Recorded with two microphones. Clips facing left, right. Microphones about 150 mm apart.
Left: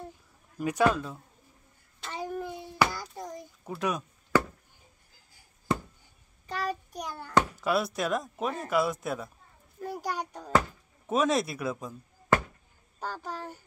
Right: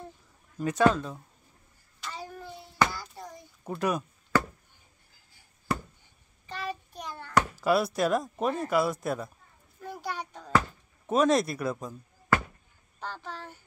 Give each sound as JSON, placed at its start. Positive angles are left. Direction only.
{"t": 0.6, "sound": "speech", "side_deg": 10}
{"t": 2.0, "sound": "child singing", "side_deg": 20}
{"t": 3.6, "sound": "speech", "side_deg": 0}
{"t": 5.7, "sound": "a sound", "side_deg": 20}
{"t": 6.4, "sound": "child singing", "side_deg": 40}
{"t": 6.9, "sound": "a sound", "side_deg": 10}
{"t": 7.6, "sound": "speech", "side_deg": 0}
{"t": 9.8, "sound": "a sound", "side_deg": 40}
{"t": 11.1, "sound": "speech", "side_deg": 0}
{"t": 13.0, "sound": "a child's voice", "side_deg": 40}